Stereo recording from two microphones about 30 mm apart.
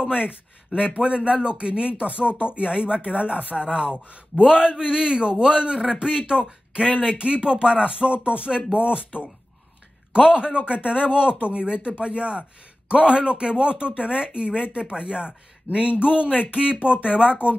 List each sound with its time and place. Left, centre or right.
0.1 s a man's voice: right
7.9 s a man's voice: right